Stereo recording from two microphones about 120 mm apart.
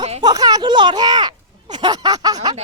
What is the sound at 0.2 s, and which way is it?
Speech, 35° right (ahead or behind).